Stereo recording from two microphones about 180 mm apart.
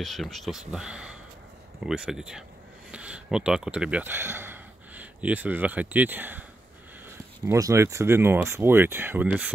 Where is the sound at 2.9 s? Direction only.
5° right (ahead or behind).